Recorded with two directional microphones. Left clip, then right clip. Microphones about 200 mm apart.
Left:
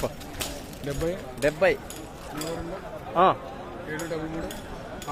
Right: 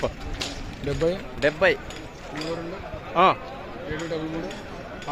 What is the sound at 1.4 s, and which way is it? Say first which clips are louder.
Speech: right 1 dB; centre (ahead or behind).